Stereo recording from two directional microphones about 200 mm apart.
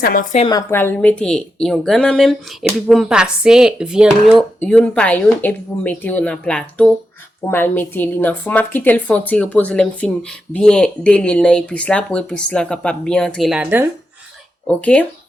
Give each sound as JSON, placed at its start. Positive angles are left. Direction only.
{"t": 0.0, "sound": "a woman's voice", "side_deg": 45}
{"t": 0.3, "sound": "a woman's voice", "side_deg": 25}
{"t": 0.7, "sound": "a woman's voice", "side_deg": 10}
{"t": 14.7, "sound": "speech", "side_deg": 5}